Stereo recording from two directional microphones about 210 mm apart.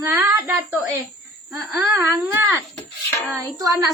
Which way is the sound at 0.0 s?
15° right (ahead or behind).